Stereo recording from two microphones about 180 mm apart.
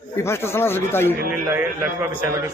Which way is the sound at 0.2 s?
15° left (ahead or behind).